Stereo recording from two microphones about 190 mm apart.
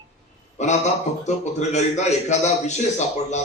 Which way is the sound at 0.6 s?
35° left (ahead or behind).